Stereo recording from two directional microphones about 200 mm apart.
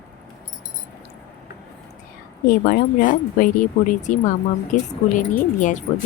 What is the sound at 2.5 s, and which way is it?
Speech, 45° left (ahead or behind).